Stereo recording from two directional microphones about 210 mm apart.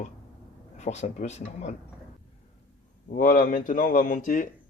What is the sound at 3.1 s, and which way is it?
Speech, 40° left (ahead or behind).